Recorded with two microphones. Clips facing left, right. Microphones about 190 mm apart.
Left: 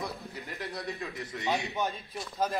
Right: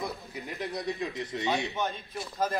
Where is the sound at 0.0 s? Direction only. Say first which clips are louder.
Right 2 dB; 15° right (ahead or behind).